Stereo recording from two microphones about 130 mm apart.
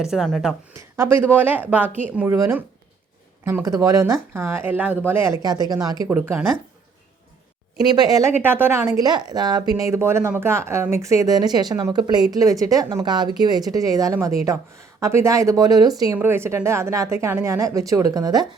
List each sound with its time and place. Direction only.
0.0 s speech: 5° right (ahead or behind)
0.7 s a woman's voice: 20° right (ahead or behind)
6.1 s a woman's voice: 15° right (ahead or behind)
7.9 s a woman's voice: 30° right (ahead or behind)
8.3 s a woman's voice: 15° right (ahead or behind)
9.0 s a woman's voice: 30° right (ahead or behind)
16.1 s a woman's voice: 15° right (ahead or behind)